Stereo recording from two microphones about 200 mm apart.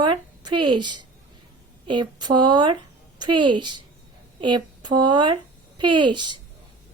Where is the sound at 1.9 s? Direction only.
20° right (ahead or behind).